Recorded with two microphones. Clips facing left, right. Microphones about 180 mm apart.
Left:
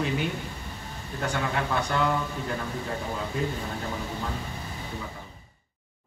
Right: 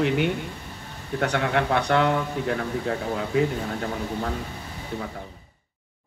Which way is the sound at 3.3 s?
70° right (ahead or behind).